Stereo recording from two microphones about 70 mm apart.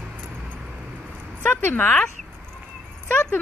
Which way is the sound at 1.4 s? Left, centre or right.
Left.